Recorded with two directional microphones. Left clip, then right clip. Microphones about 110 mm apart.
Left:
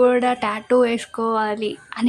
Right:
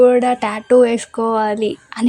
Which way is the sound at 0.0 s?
25° right (ahead or behind).